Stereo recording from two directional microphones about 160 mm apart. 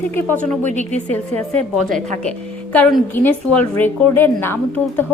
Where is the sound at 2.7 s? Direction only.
10° left (ahead or behind).